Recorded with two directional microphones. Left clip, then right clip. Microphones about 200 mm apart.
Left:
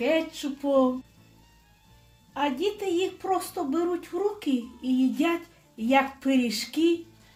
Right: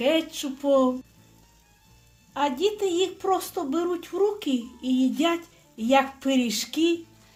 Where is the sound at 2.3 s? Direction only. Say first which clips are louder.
Right 3 dB; 30° right (ahead or behind).